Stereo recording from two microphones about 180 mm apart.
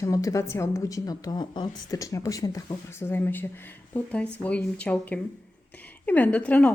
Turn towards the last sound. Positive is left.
turn(degrees=5)  # may be behind; listen again after turning